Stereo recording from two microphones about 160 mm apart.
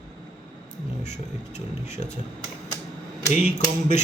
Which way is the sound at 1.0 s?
45° left (ahead or behind).